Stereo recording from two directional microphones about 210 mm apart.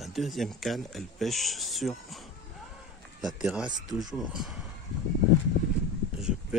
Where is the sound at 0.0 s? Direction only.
Centre (ahead or behind).